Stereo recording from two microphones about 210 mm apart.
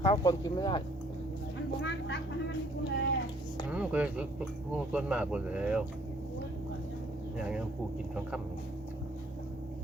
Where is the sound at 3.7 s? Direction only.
5° right (ahead or behind).